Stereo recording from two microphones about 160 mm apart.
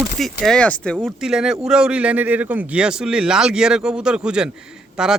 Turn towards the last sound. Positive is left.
turn(degrees=-5)  # may be behind; listen again after turning